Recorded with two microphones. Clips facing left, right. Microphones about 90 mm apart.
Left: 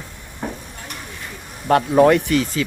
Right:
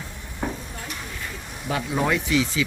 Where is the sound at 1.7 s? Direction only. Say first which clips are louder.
Left 11 dB; 55° left (ahead or behind).